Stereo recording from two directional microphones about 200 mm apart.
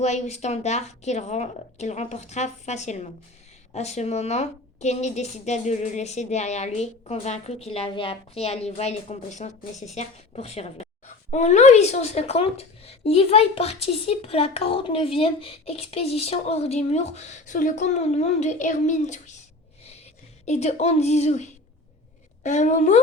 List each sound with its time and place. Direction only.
0.0 s a woman's voice: 35° left (ahead or behind)
20.4 s a woman's voice: 35° left (ahead or behind)